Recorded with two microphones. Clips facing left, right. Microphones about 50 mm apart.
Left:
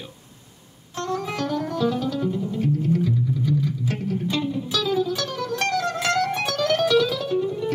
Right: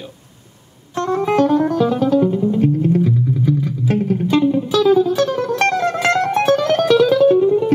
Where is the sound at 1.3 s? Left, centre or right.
Right.